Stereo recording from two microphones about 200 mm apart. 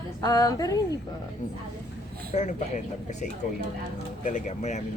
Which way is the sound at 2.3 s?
35° left (ahead or behind).